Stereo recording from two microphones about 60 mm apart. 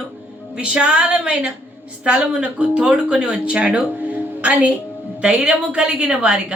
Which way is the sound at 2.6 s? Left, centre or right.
Centre.